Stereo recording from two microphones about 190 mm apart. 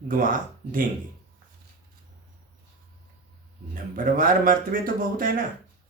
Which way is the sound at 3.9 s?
45° right (ahead or behind).